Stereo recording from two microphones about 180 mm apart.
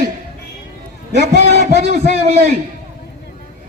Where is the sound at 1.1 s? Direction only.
70° right (ahead or behind).